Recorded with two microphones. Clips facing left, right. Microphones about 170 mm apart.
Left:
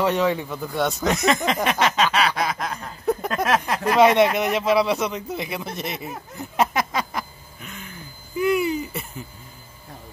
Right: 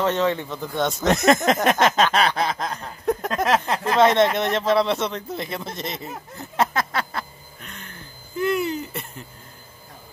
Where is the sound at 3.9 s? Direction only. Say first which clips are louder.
Left 1 dB; 10° left (ahead or behind).